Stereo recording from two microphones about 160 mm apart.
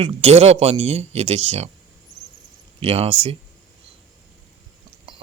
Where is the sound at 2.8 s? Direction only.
40° right (ahead or behind).